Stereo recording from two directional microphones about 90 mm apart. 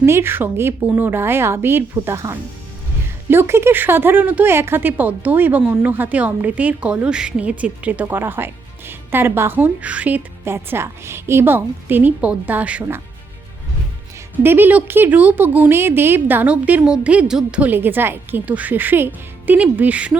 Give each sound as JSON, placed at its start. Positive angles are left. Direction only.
{"t": 0.0, "sound": "speech", "side_deg": -25}
{"t": 10.4, "sound": "speech", "side_deg": -30}
{"t": 14.3, "sound": "speech", "side_deg": -25}